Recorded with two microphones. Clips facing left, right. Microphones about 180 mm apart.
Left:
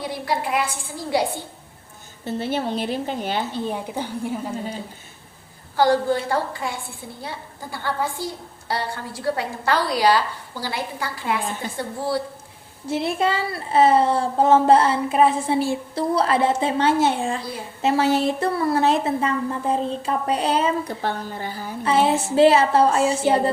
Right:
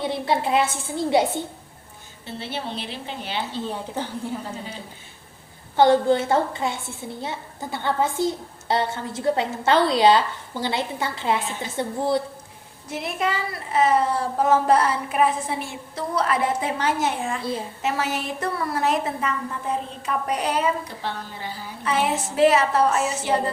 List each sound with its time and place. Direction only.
0.0 s a woman's voice: 25° right (ahead or behind)
2.2 s a woman's voice: 45° left (ahead or behind)
3.5 s a woman's voice: 15° left (ahead or behind)
5.7 s a woman's voice: 20° right (ahead or behind)
12.9 s speech: 30° left (ahead or behind)
21.0 s a woman's voice: 50° left (ahead or behind)
21.8 s speech: 30° left (ahead or behind)